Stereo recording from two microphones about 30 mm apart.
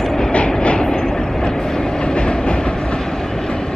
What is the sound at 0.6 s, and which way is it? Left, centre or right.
Train, left.